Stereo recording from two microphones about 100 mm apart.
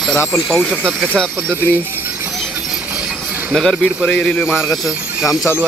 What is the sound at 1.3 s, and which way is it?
Speech, 25° right (ahead or behind).